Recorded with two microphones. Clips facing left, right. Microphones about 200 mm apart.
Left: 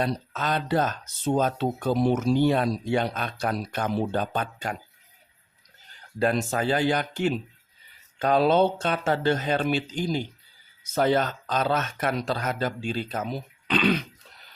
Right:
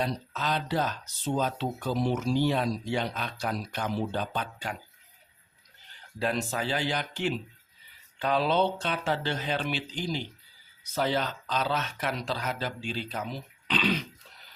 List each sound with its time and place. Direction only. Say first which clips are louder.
0.0 s speech: left 3 dB; 55° left (ahead or behind)
6.1 s speech: left 5 dB; 50° left (ahead or behind)